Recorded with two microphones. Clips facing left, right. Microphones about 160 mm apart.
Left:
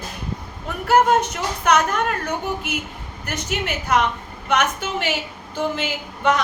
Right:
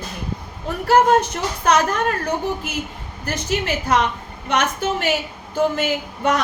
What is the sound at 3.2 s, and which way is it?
Speech, 35° right (ahead or behind).